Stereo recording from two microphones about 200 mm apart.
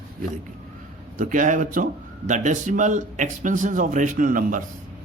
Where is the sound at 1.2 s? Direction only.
40° right (ahead or behind).